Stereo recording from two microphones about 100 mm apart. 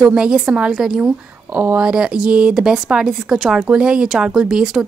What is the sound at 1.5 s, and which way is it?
Speech, 20° right (ahead or behind).